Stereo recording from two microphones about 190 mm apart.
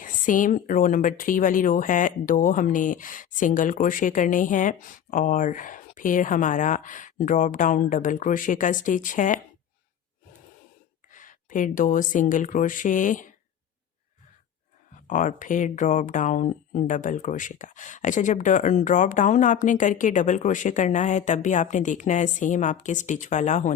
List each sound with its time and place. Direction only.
0.0 s speech: 45° left (ahead or behind)
11.1 s speech: 45° left (ahead or behind)
15.0 s speech: 40° left (ahead or behind)